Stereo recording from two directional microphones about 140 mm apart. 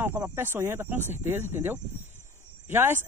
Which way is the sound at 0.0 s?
20° right (ahead or behind).